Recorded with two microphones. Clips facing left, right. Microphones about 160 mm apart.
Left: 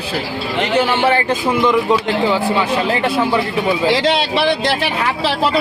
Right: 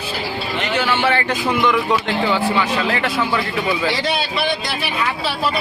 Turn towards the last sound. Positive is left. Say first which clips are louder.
# left 6 dB
turn(degrees=80)